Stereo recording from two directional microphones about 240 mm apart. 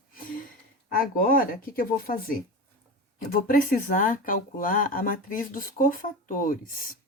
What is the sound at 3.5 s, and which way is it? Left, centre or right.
Speech, left.